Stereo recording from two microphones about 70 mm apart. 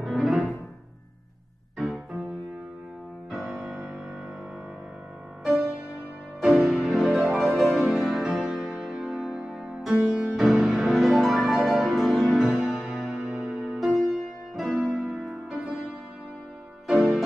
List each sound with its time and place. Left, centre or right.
0.0 s music: centre
1.8 s music: centre
5.4 s music: centre
13.1 s music: centre
13.7 s music: centre
14.5 s piano: centre
15.2 s music: centre
16.8 s music: centre